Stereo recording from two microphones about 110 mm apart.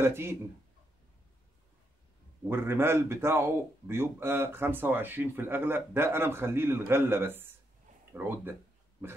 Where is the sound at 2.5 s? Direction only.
20° right (ahead or behind).